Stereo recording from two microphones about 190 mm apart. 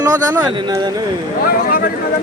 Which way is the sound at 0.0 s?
20° right (ahead or behind).